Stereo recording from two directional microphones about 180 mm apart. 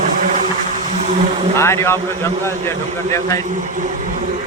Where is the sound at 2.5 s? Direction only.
15° left (ahead or behind).